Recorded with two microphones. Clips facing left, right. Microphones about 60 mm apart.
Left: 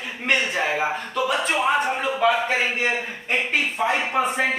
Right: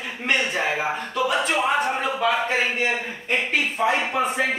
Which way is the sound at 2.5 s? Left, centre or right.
Centre.